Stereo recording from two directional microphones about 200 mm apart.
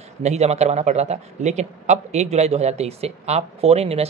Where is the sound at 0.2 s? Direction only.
35° right (ahead or behind).